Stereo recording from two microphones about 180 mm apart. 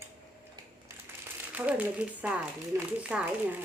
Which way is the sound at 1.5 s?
10° right (ahead or behind).